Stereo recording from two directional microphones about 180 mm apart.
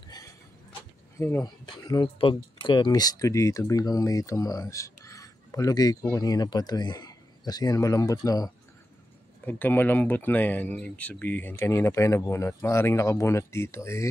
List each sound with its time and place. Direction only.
1.1 s speech: 15° left (ahead or behind)
9.5 s speech: 10° left (ahead or behind)